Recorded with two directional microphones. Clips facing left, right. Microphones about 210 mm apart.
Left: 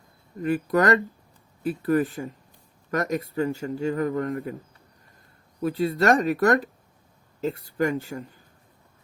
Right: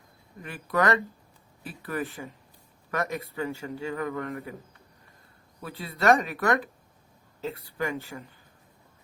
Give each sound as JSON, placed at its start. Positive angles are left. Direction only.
{"t": 0.4, "sound": "a man's voice", "side_deg": 45}
{"t": 5.6, "sound": "speech", "side_deg": 45}